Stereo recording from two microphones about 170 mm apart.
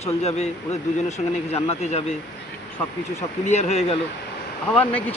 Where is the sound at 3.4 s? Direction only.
40° left (ahead or behind).